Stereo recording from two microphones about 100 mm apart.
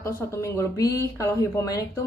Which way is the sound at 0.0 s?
25° left (ahead or behind).